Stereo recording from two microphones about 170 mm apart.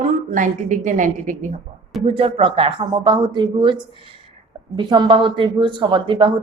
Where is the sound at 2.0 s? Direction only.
35° right (ahead or behind).